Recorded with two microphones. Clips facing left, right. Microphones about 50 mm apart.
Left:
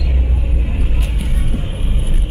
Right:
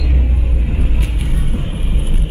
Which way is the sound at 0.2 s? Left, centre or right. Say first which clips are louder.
Right 1 dB; centre.